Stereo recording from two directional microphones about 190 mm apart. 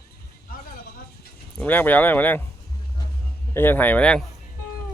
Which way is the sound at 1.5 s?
10° left (ahead or behind).